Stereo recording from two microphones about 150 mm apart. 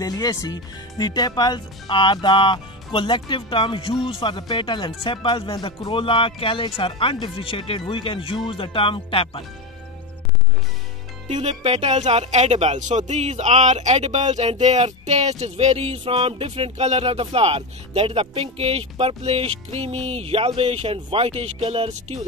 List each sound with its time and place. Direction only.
0.0 s speech: 25° left (ahead or behind)
11.2 s speech: 45° right (ahead or behind)